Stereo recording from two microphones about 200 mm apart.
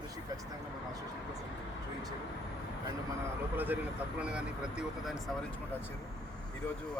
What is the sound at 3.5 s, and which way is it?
Speech, 10° right (ahead or behind).